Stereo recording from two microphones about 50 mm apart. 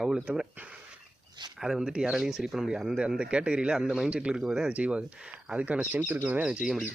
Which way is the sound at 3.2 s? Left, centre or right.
Right.